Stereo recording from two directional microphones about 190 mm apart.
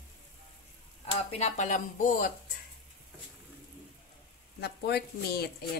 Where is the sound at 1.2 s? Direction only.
35° left (ahead or behind).